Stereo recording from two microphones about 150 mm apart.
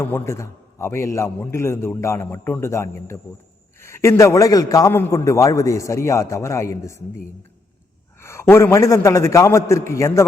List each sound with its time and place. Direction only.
0.0 s a man's voice: 15° left (ahead or behind)
8.2 s a man's voice: 15° left (ahead or behind)